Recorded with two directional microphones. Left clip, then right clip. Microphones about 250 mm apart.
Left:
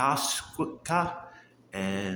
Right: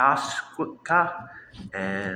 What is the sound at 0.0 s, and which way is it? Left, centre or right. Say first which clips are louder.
Speech: right 5 dB; left.